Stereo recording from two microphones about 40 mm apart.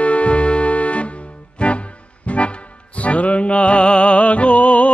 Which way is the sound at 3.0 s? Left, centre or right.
Left.